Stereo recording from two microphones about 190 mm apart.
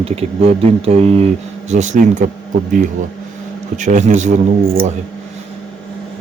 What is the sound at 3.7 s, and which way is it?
Speech, 40° right (ahead or behind).